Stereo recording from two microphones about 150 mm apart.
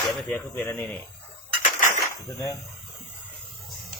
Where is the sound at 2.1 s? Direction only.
20° left (ahead or behind).